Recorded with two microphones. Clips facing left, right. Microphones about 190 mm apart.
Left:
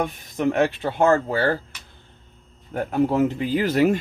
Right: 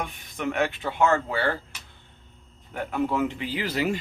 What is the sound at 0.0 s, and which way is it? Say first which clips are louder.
Speech: left 7 dB; 40° left (ahead or behind).